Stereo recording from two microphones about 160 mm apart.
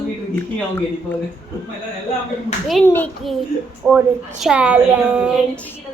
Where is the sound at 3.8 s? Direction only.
5° right (ahead or behind).